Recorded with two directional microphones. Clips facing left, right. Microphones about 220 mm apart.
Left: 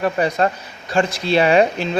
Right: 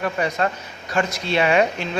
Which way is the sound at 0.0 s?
35° left (ahead or behind).